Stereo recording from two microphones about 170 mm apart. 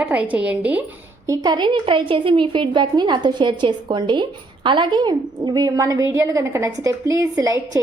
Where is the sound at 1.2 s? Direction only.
20° right (ahead or behind).